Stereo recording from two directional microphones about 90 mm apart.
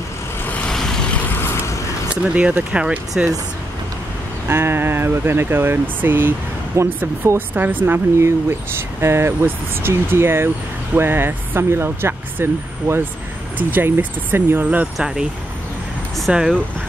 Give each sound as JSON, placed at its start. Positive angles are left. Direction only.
{"t": 0.5, "sound": "vehicle", "side_deg": 5}
{"t": 1.4, "sound": "a sound", "side_deg": 30}
{"t": 2.2, "sound": "speech", "side_deg": -15}
{"t": 4.5, "sound": "speech", "side_deg": -25}
{"t": 6.7, "sound": "speech", "side_deg": -30}
{"t": 15.0, "sound": "speech", "side_deg": -10}